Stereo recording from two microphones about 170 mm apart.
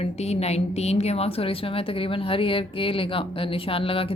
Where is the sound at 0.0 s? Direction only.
40° left (ahead or behind).